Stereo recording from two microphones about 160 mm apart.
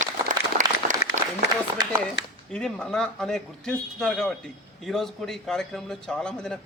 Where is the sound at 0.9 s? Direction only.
50° right (ahead or behind).